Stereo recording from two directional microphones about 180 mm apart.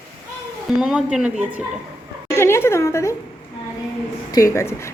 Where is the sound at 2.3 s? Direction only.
15° left (ahead or behind).